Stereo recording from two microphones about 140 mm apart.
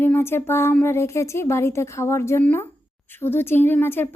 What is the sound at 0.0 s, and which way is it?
Speech, 15° left (ahead or behind).